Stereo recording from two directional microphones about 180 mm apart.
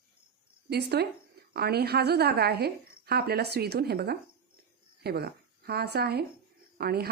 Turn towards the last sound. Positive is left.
turn(degrees=-60)  # may be behind; listen again after turning